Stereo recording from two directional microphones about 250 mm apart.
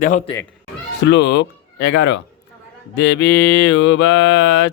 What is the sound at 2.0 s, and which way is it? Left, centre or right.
Mantra, left.